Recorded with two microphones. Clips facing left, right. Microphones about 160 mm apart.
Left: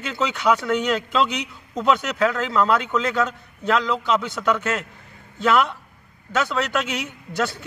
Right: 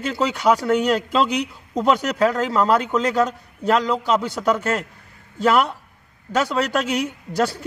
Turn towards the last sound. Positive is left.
turn(degrees=-35)  # may be behind; listen again after turning